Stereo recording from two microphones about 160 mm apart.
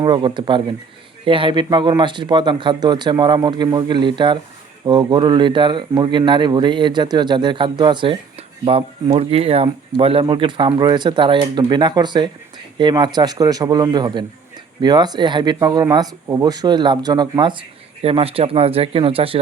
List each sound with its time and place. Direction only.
0.0 s speech: 30° right (ahead or behind)
9.1 s speech: 40° right (ahead or behind)
18.0 s speech: 35° right (ahead or behind)